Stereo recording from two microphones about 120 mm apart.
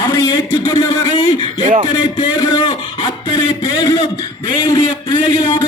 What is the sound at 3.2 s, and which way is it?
A man's voice, 30° left (ahead or behind).